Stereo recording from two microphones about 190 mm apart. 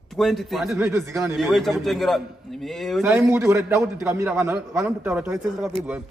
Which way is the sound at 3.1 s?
15° right (ahead or behind).